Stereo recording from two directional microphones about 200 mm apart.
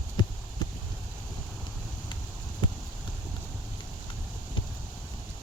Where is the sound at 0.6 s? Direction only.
20° left (ahead or behind).